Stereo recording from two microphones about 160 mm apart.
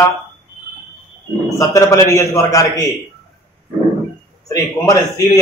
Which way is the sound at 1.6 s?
20° left (ahead or behind).